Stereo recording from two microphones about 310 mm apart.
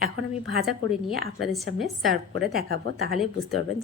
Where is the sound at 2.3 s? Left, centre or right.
Right.